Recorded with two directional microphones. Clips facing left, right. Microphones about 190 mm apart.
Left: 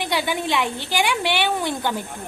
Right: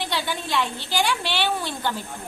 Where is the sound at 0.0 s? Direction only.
15° left (ahead or behind).